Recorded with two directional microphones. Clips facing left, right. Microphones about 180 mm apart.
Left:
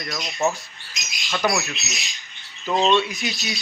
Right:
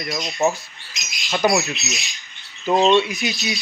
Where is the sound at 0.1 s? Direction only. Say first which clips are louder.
Right 3 dB; 20° right (ahead or behind).